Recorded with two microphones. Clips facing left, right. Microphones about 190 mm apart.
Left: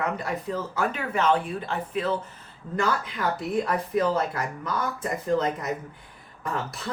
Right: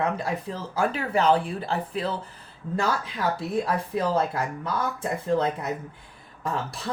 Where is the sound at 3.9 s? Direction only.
25° right (ahead or behind).